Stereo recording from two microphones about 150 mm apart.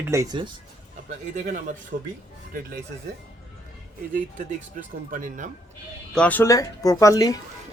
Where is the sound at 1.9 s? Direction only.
70° right (ahead or behind).